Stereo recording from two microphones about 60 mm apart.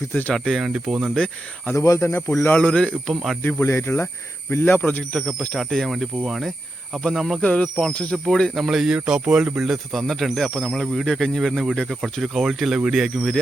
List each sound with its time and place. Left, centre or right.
0.1 s speech: left
0.5 s speech: centre
1.7 s speech: left
2.2 s speech: left
2.5 s speech: left
3.1 s speech: centre
3.6 s speech: left
4.8 s speech: left
5.5 s speech: centre
7.4 s speech: left
8.1 s speech: centre
8.5 s speech: centre
9.6 s speech: centre